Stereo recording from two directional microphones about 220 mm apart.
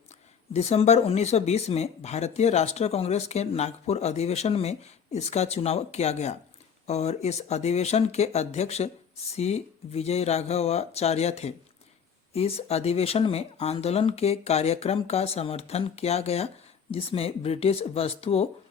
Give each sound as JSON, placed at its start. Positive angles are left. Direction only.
{"t": 0.5, "sound": "speech", "side_deg": 30}